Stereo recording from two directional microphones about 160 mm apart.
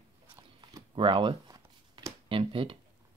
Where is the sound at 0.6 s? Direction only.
30° right (ahead or behind).